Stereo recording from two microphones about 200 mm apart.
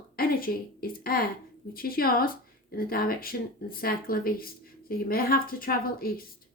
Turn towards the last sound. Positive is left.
turn(degrees=45)  # may be behind; listen again after turning